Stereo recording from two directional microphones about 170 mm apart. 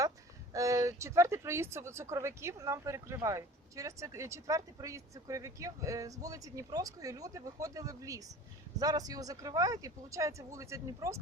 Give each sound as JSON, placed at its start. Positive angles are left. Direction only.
{"t": 0.5, "sound": "speech", "side_deg": -20}